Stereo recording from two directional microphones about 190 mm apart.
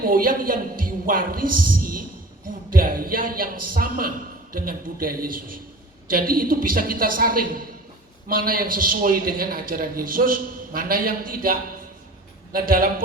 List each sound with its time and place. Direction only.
0.0 s a woman's voice: 45° right (ahead or behind)
12.5 s a man's voice: 50° right (ahead or behind)